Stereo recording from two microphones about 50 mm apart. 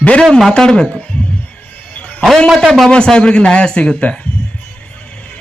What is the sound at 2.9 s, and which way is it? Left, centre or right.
A man's voice, centre.